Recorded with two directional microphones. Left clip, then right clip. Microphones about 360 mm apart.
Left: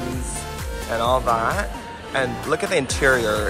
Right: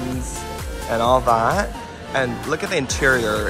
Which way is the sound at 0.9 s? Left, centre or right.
Centre.